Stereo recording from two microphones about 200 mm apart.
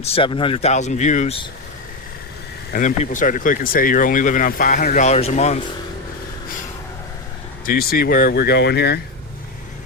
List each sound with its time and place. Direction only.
0.0 s speech: 30° left (ahead or behind)
2.7 s speech: 40° left (ahead or behind)
7.6 s speech: 50° left (ahead or behind)